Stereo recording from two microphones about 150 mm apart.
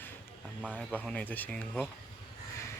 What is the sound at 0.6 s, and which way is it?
Speech, 5° right (ahead or behind).